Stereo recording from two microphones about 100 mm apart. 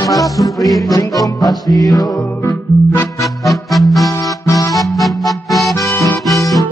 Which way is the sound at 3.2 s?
Centre (ahead or behind).